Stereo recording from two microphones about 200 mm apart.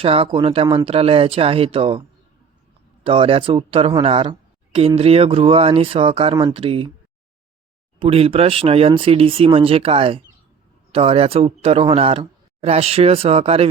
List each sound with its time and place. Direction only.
0.0 s a man's voice: 25° right (ahead or behind)
7.9 s a man's voice: 30° right (ahead or behind)